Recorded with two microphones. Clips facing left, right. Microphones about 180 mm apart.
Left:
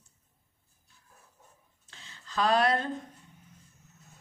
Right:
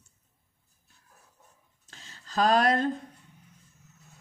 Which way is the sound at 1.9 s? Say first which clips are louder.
Right 4 dB; 40° right (ahead or behind).